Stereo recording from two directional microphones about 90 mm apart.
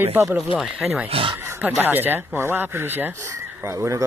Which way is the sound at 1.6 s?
20° right (ahead or behind).